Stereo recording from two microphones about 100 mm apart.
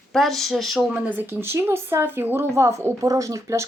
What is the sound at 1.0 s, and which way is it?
Speech, 20° right (ahead or behind).